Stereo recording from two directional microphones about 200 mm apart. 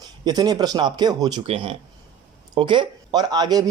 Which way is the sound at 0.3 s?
20° right (ahead or behind).